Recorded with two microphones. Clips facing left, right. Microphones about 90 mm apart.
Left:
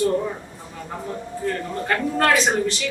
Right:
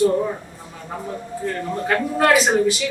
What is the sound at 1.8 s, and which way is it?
Speech, 5° right (ahead or behind).